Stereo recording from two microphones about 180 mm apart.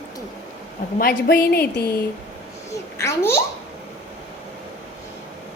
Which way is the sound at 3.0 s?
15° left (ahead or behind).